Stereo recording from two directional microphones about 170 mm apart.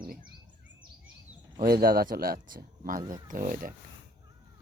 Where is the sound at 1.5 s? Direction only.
60° right (ahead or behind).